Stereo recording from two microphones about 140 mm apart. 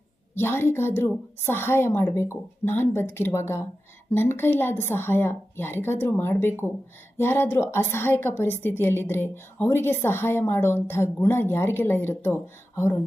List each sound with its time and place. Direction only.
0.3 s a woman's voice: 15° left (ahead or behind)